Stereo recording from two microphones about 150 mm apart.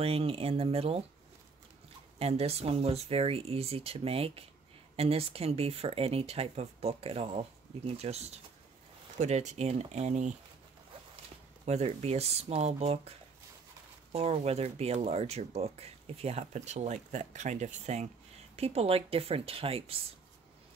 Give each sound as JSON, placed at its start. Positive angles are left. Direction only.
{"t": 0.0, "sound": "speech", "side_deg": -40}
{"t": 2.1, "sound": "speech", "side_deg": -45}
{"t": 11.6, "sound": "speech", "side_deg": -45}
{"t": 14.1, "sound": "speech", "side_deg": -45}